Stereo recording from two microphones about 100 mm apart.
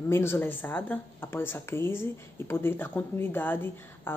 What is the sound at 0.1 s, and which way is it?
Speech, 25° left (ahead or behind).